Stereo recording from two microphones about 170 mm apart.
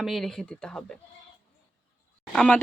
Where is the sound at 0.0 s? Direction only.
Centre (ahead or behind).